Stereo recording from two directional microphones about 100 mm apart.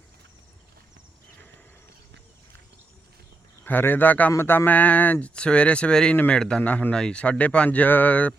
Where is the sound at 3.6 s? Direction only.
20° left (ahead or behind).